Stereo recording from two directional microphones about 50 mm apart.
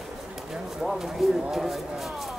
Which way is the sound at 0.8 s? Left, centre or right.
Centre.